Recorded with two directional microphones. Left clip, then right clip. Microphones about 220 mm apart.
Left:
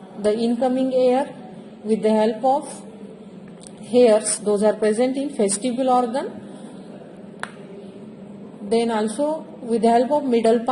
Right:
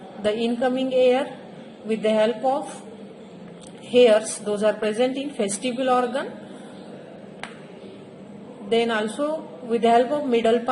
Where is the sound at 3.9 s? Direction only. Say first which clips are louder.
Left 1 dB; 35° left (ahead or behind).